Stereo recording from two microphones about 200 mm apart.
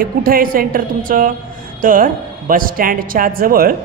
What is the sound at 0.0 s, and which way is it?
A woman's voice, 45° right (ahead or behind).